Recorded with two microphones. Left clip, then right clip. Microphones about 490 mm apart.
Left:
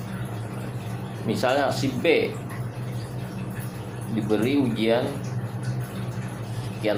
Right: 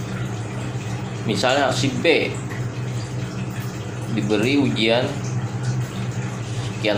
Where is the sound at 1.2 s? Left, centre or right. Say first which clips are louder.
Right 4 dB; left.